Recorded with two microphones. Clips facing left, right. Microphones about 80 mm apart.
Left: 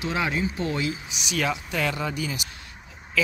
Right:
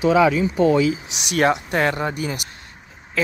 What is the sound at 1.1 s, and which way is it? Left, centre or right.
Speech, right.